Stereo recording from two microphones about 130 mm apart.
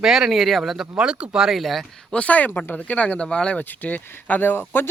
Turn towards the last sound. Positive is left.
turn(degrees=15)  # may be behind; listen again after turning